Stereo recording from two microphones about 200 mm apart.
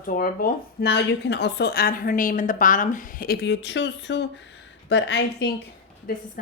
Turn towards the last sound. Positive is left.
turn(degrees=45)  # may be behind; listen again after turning